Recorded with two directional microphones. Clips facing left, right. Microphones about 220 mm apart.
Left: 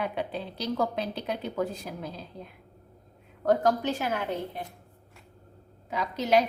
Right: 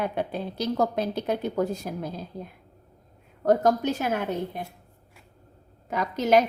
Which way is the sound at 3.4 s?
45° right (ahead or behind).